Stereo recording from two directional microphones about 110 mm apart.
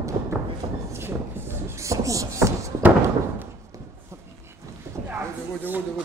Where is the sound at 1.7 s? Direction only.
30° right (ahead or behind).